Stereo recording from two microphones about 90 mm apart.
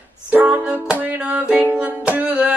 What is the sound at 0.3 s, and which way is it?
Music, 15° right (ahead or behind).